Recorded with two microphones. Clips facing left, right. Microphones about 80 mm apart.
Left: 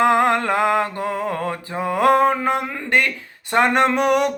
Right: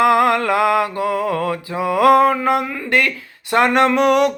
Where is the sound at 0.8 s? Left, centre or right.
Right.